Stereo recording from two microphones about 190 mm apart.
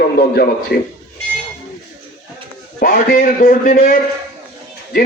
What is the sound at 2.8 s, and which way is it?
A man's voice, 50° left (ahead or behind).